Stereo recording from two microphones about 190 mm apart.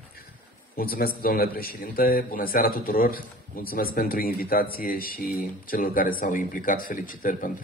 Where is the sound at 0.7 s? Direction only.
50° left (ahead or behind).